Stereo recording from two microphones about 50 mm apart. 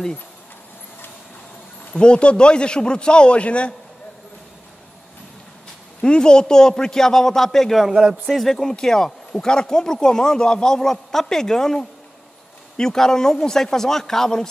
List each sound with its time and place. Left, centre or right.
2.0 s a man's voice: left
6.0 s speech: centre